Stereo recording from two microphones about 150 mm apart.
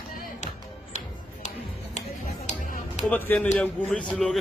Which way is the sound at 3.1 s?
10° left (ahead or behind).